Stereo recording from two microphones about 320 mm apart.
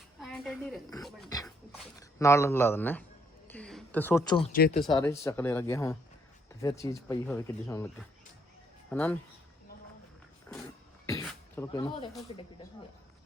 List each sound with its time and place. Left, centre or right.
0.2 s speech: centre
1.3 s dog: centre
2.0 s speech: centre
3.4 s a sound: centre
4.5 s speech: left
4.9 s speech: centre
8.9 s speech: centre
11.0 s a sound: centre
12.3 s speech: centre